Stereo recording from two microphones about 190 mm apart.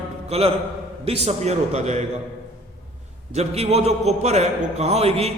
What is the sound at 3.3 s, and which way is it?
A man's voice, 35° right (ahead or behind).